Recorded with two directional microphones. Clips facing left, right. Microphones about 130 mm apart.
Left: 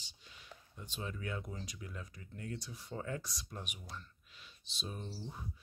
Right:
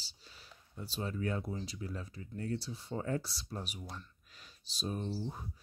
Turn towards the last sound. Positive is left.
turn(degrees=-40)  # may be behind; listen again after turning